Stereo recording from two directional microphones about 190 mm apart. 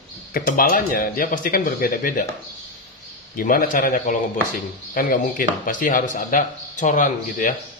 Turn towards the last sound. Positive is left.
turn(degrees=45)  # may be behind; listen again after turning